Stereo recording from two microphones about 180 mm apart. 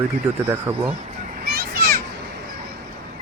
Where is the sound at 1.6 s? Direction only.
55° right (ahead or behind).